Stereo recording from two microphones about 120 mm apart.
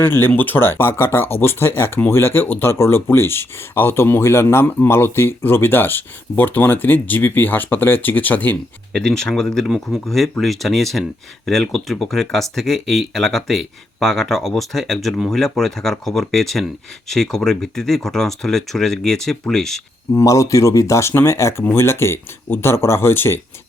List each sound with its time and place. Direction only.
0.0 s speech: 20° left (ahead or behind)
20.1 s speech: 30° left (ahead or behind)